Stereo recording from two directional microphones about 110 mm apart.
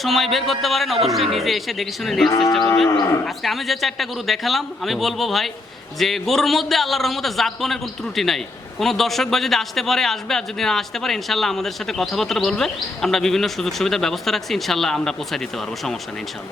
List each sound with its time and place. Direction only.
0.0 s a man's voice: centre (ahead or behind)
2.9 s cattle: 35° left (ahead or behind)
3.2 s a man's voice: centre (ahead or behind)